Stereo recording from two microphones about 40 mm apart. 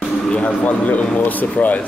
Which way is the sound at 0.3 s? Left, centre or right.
Left.